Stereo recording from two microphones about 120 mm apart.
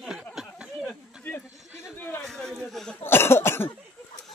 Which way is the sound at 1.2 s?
15° left (ahead or behind).